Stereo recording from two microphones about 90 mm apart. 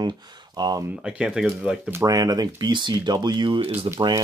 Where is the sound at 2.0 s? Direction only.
45° right (ahead or behind); by 3.9 s 80° right.